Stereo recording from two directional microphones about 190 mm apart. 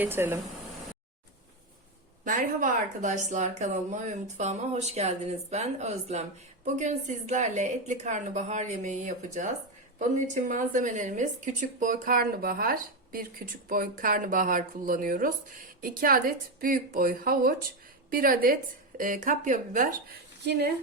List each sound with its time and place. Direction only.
0.0 s speech: 10° right (ahead or behind)
2.2 s a woman's voice: 45° right (ahead or behind)